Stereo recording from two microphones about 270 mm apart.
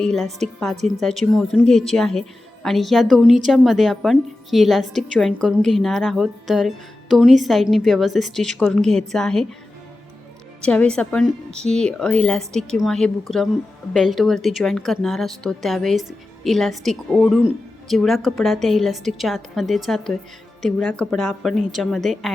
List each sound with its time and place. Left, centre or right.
0.0 s speech: centre
10.7 s speech: centre